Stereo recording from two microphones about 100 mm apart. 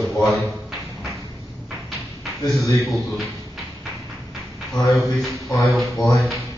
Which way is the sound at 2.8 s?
Centre (ahead or behind).